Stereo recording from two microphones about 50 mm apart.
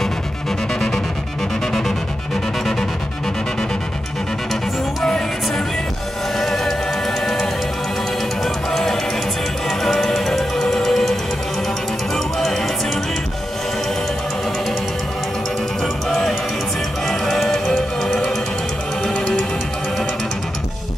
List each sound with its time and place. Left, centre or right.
6.3 s music: centre
8.7 s music: centre
12.4 s music: centre
15.8 s music: centre